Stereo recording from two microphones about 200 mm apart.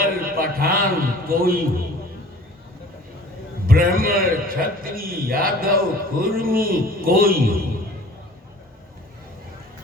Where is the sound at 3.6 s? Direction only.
45° right (ahead or behind).